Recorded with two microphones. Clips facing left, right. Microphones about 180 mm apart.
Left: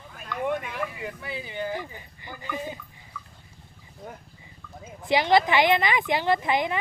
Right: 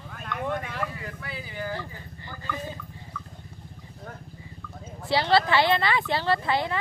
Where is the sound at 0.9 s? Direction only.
20° left (ahead or behind).